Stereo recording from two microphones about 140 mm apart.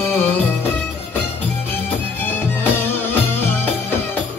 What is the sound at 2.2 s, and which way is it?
Music, 15° left (ahead or behind).